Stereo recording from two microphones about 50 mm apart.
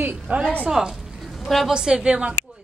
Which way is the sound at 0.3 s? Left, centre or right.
Right.